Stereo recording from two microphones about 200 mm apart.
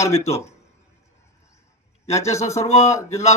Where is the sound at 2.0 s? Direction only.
35° left (ahead or behind).